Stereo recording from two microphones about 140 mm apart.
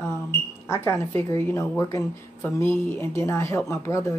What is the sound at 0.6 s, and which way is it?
A woman's voice, 20° left (ahead or behind).